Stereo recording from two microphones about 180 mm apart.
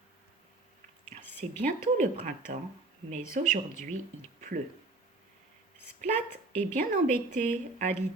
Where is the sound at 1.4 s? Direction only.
45° right (ahead or behind).